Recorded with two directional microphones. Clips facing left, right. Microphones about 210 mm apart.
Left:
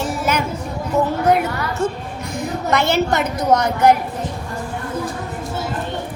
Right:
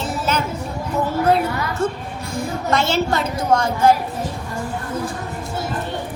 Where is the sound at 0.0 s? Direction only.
15° left (ahead or behind).